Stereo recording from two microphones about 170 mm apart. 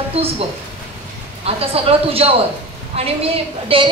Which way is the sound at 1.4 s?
35° right (ahead or behind).